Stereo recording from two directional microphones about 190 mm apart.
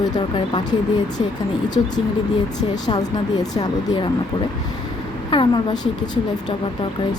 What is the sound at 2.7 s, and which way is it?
Speech, 20° left (ahead or behind).